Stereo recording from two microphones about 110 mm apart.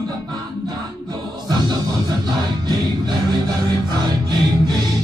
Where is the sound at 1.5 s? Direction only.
40° right (ahead or behind).